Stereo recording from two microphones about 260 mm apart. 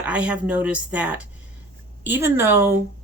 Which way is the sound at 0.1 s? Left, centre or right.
Centre.